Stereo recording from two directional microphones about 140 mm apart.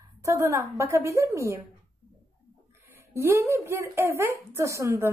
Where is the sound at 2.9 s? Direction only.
20° right (ahead or behind).